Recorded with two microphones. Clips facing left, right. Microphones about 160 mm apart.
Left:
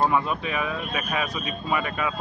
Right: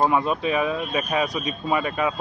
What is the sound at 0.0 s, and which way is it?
Speech, 20° right (ahead or behind).